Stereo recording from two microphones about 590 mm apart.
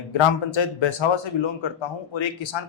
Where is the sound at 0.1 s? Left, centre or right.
Left.